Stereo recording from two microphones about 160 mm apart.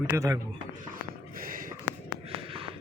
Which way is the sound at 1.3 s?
60° right (ahead or behind).